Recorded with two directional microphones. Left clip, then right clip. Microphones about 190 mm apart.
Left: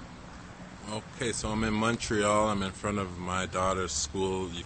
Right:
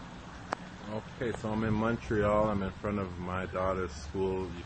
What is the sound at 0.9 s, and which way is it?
Speech, 20° left (ahead or behind).